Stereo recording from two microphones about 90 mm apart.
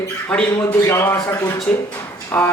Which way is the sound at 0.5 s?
40° left (ahead or behind).